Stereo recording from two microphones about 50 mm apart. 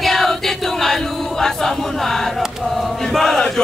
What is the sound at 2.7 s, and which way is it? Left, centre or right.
Chant, centre.